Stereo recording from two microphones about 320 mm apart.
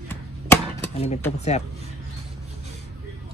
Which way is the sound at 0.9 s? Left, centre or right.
Centre.